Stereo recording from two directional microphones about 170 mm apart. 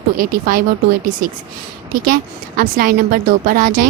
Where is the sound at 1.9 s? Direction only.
55° right (ahead or behind).